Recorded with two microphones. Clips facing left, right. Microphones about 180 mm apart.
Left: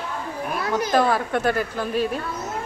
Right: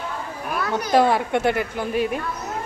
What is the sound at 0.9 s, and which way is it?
A woman's voice, 20° right (ahead or behind).